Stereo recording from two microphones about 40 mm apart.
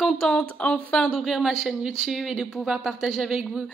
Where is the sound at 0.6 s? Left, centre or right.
Left.